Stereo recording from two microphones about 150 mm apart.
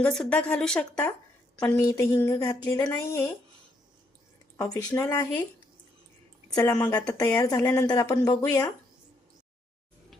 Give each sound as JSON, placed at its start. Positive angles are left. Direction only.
{"t": 0.0, "sound": "a woman's voice", "side_deg": 5}
{"t": 4.5, "sound": "a woman's voice", "side_deg": 25}
{"t": 6.5, "sound": "a woman's voice", "side_deg": 20}